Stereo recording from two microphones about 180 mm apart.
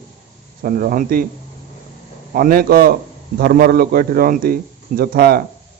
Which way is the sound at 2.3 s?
55° right (ahead or behind).